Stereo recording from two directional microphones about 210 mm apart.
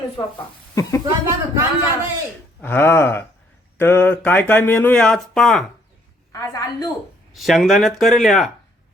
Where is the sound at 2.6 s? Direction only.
10° left (ahead or behind).